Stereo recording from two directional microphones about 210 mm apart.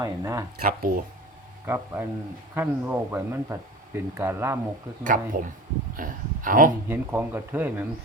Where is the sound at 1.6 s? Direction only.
10° right (ahead or behind).